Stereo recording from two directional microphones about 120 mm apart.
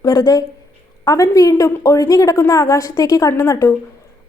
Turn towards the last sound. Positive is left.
turn(degrees=25)  # may be behind; listen again after turning